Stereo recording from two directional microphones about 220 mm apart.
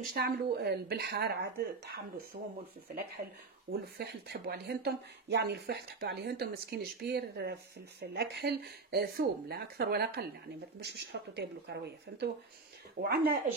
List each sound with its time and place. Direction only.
0.1 s speech: 45° right (ahead or behind)
3.7 s speech: 45° right (ahead or behind)